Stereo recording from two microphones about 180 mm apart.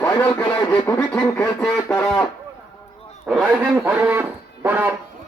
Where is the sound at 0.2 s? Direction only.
10° left (ahead or behind).